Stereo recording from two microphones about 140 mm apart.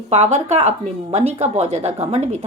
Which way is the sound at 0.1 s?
55° right (ahead or behind).